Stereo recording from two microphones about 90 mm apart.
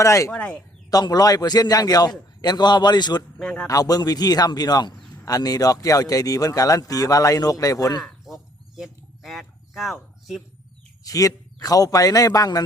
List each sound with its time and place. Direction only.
0.0 s a man's voice: 35° left (ahead or behind)
0.3 s speech: 15° left (ahead or behind)
0.9 s a man's voice: 45° left (ahead or behind)
3.3 s speech: 10° left (ahead or behind)
3.7 s a man's voice: 45° left (ahead or behind)
8.0 s a sound: centre (ahead or behind)
11.0 s a man's voice: 40° left (ahead or behind)